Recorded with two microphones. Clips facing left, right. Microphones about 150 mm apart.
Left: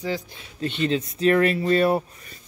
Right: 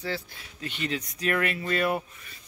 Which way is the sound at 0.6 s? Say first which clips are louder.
Left 8 dB; 30° left (ahead or behind).